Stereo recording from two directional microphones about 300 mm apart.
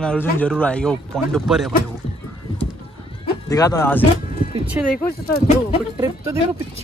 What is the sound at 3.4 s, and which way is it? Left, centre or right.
Speech, centre.